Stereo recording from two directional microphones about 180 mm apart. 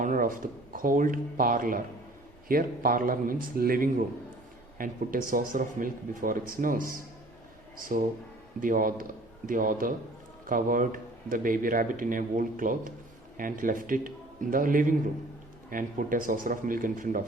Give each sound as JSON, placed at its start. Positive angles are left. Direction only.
{"t": 0.0, "sound": "speech", "side_deg": -50}